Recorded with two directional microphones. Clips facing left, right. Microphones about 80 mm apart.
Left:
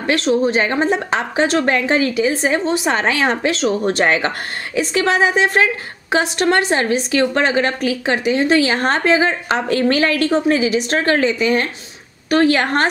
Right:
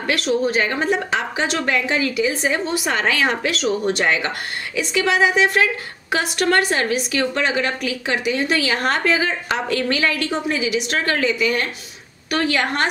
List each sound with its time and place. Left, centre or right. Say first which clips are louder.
0.0 s a woman's voice: left 4 dB; left